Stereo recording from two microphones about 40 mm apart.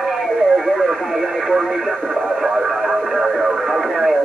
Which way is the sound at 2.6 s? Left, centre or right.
Centre.